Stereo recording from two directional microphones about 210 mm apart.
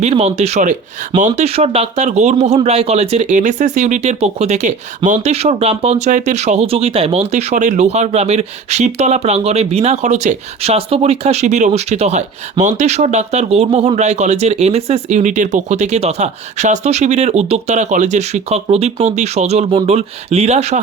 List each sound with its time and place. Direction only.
0.0 s speech: 30° right (ahead or behind)